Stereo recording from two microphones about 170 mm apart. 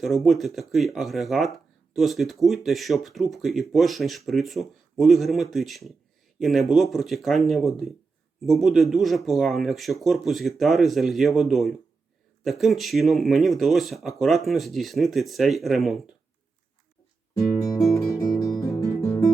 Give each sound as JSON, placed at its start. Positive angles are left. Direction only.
{"t": 0.0, "sound": "speech", "side_deg": 0}
{"t": 17.3, "sound": "guitar", "side_deg": 20}
{"t": 17.7, "sound": "music", "side_deg": 0}
{"t": 18.0, "sound": "music", "side_deg": 20}